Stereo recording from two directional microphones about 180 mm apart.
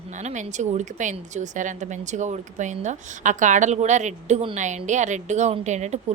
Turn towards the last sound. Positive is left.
turn(degrees=-40)  # may be behind; listen again after turning